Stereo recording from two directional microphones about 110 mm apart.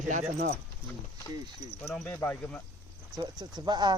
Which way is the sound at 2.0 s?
20° left (ahead or behind).